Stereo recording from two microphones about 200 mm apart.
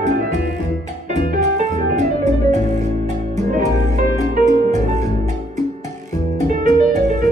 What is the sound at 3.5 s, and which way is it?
Music, 40° right (ahead or behind).